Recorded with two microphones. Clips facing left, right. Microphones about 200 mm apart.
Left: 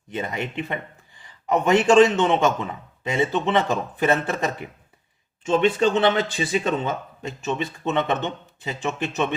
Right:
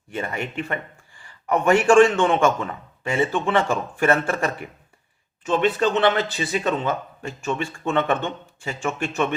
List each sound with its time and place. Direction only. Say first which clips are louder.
0.1 s a man's voice: even; 20° left (ahead or behind)
5.5 s speech: left 1 dB; 25° left (ahead or behind)